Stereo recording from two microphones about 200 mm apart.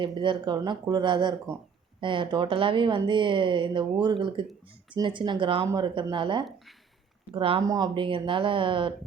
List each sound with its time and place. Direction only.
0.0 s speech: 25° right (ahead or behind)